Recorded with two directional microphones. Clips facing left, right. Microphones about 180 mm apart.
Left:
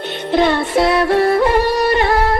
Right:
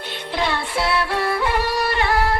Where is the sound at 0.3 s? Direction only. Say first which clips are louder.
Left 10 dB; 45° left (ahead or behind).